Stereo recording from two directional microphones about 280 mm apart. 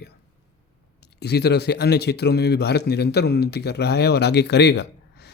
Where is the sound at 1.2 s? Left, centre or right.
Left.